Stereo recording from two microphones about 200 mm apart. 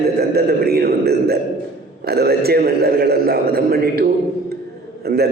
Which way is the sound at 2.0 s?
50° right (ahead or behind).